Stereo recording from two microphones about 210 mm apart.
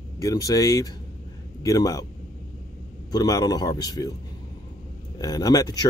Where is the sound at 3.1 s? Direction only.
15° left (ahead or behind).